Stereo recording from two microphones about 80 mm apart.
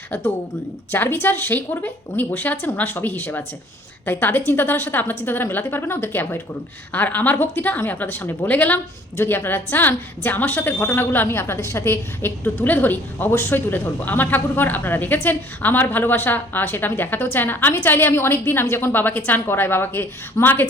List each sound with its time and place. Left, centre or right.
0.1 s a woman's voice: left